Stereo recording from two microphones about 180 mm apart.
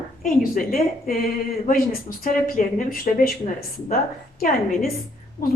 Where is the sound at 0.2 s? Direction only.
50° left (ahead or behind).